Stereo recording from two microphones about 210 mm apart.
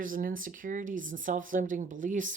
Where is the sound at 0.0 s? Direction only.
40° right (ahead or behind).